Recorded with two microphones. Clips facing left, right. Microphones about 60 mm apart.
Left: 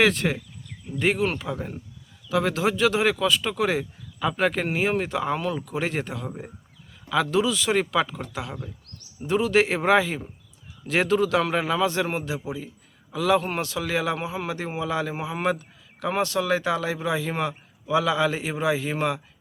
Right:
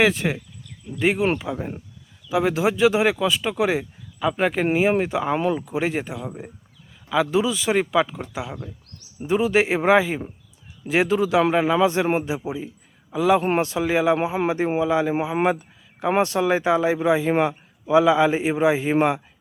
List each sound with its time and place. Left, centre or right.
0.0 s a man's voice: centre
14.2 s speech: right